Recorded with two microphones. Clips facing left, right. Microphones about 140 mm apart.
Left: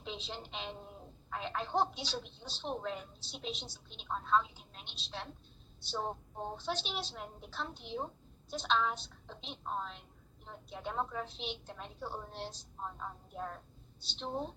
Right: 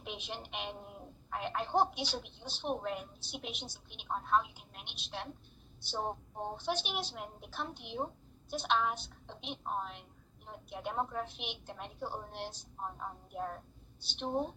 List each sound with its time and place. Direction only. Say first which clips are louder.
0.0 s a woman's voice: even; 15° right (ahead or behind)